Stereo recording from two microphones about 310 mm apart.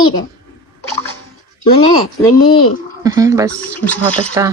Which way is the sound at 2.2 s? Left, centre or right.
Centre.